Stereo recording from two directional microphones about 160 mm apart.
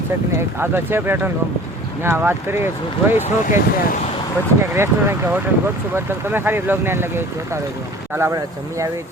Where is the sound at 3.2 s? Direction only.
55° left (ahead or behind).